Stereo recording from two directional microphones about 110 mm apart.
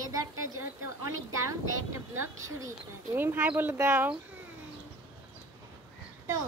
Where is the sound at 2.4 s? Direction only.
30° right (ahead or behind).